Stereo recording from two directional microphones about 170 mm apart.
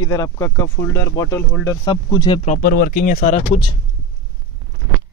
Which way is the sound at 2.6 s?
60° left (ahead or behind).